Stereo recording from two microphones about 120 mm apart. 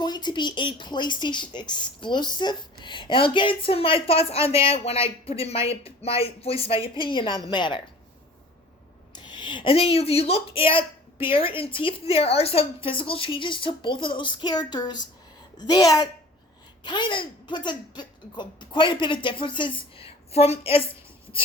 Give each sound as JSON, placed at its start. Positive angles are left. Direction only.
{"t": 0.0, "sound": "a woman's voice", "side_deg": 35}
{"t": 9.1, "sound": "a woman's voice", "side_deg": 40}